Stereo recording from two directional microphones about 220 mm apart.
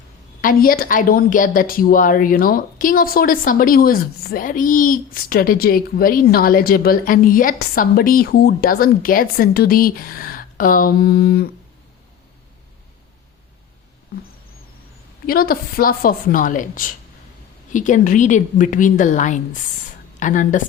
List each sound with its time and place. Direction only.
0.4 s a woman's voice: 40° left (ahead or behind)
15.3 s a woman's voice: 40° left (ahead or behind)